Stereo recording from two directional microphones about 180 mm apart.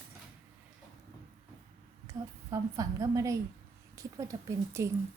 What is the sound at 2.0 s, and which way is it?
Speech, 15° right (ahead or behind).